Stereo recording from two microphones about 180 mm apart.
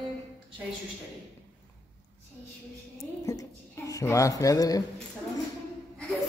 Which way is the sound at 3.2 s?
15° left (ahead or behind).